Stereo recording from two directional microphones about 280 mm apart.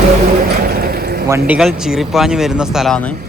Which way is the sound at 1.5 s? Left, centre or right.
Centre.